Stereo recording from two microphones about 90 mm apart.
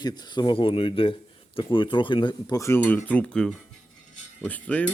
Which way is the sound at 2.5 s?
35° left (ahead or behind).